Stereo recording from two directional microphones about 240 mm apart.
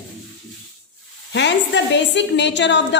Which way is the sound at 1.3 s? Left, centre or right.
Left.